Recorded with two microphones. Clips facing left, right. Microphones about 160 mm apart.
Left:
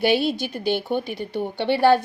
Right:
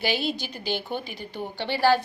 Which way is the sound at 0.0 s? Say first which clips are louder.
Left 7 dB; 55° left (ahead or behind).